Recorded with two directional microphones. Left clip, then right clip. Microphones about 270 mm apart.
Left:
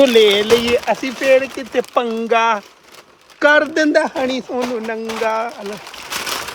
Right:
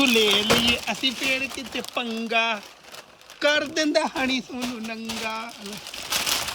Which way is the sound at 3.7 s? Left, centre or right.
Centre.